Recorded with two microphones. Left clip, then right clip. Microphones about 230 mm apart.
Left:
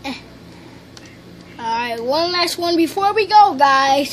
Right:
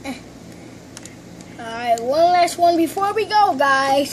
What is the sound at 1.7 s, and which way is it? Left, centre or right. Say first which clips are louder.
A child's voice: even; centre.